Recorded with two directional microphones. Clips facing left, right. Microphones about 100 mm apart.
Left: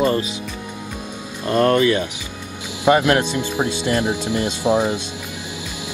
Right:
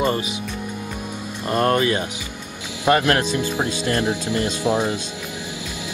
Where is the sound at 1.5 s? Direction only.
30° right (ahead or behind).